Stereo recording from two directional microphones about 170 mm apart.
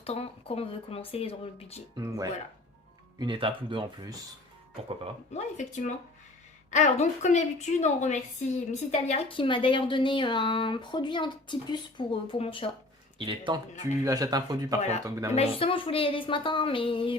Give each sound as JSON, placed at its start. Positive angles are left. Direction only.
{"t": 0.0, "sound": "a woman's voice", "side_deg": 35}
{"t": 2.0, "sound": "speech", "side_deg": -20}
{"t": 5.3, "sound": "a woman's voice", "side_deg": 45}
{"t": 13.1, "sound": "speech", "side_deg": -30}
{"t": 14.8, "sound": "a woman's voice", "side_deg": 40}
{"t": 15.0, "sound": "speech", "side_deg": -20}
{"t": 15.4, "sound": "a woman's voice", "side_deg": 35}